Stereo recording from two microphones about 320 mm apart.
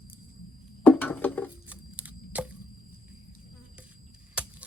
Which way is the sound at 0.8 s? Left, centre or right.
Centre.